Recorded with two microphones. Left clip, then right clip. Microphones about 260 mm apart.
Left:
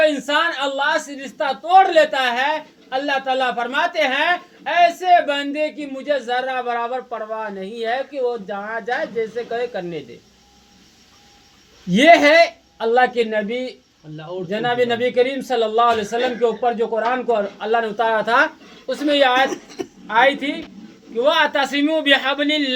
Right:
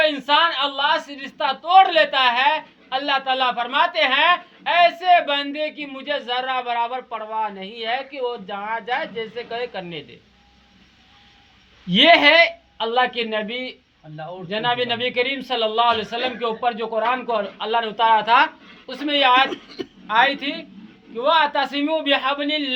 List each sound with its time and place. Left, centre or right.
0.3 s a woman's voice: centre
11.9 s a woman's voice: centre